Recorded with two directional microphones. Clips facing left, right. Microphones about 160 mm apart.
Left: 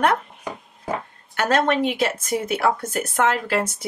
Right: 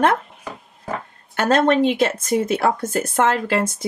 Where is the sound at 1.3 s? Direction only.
30° right (ahead or behind).